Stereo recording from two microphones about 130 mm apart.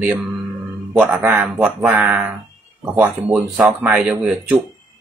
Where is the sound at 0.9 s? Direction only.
15° right (ahead or behind).